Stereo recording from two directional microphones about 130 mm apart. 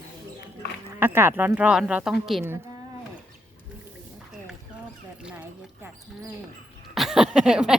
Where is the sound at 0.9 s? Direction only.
15° right (ahead or behind).